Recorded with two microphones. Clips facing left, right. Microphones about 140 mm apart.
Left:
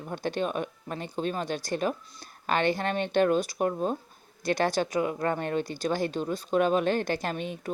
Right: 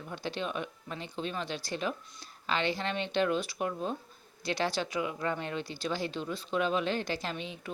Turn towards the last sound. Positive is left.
turn(degrees=50)  # may be behind; listen again after turning